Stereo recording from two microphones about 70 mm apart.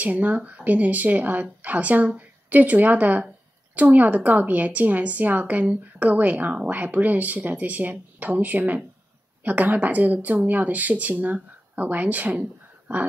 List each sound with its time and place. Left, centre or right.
0.0 s a woman's voice: right